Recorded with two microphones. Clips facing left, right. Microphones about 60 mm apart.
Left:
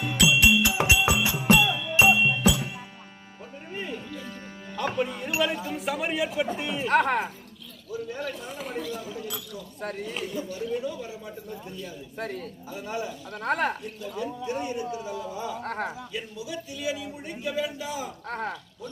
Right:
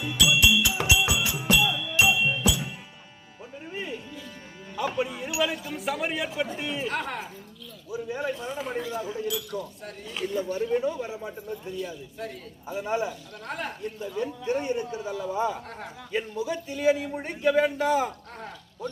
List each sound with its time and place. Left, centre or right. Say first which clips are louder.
0.0 s music: left 1 dB; left
3.7 s music: left 1 dB; centre
5.7 s a man's voice: left 1 dB; centre
6.9 s speech: left 9 dB; left
7.9 s a man's voice: right 2 dB; centre
9.8 s speech: left 7 dB; left
10.2 s a man's voice: right 8 dB; right
12.6 s a man's voice: right 6 dB; right
13.4 s speech: left 9 dB; left
13.9 s a man's voice: right 2 dB; right
15.6 s speech: left 8 dB; left
16.1 s a man's voice: right 6 dB; right
18.3 s speech: left 8 dB; left